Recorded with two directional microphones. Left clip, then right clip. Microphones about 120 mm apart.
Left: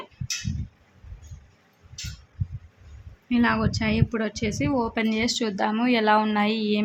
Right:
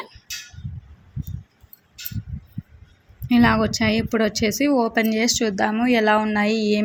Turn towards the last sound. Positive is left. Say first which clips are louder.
# right 4 dB
turn(degrees=-20)  # may be behind; listen again after turning